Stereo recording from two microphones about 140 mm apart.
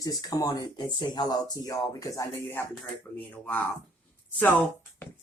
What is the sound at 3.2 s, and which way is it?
Speech, 10° left (ahead or behind).